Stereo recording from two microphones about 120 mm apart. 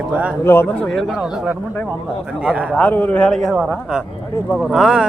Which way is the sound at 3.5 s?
5° right (ahead or behind).